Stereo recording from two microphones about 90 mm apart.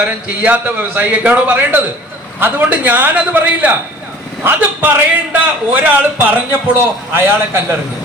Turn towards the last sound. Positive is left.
turn(degrees=-25)  # may be behind; listen again after turning